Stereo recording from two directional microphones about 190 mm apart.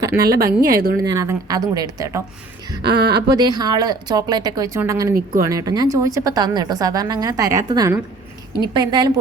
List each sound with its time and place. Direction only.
0.0 s a sound: 20° right (ahead or behind)
0.4 s a woman's voice: 50° right (ahead or behind)
1.0 s speech: 15° right (ahead or behind)
2.8 s speech: 60° right (ahead or behind)
3.2 s a woman's voice: 20° right (ahead or behind)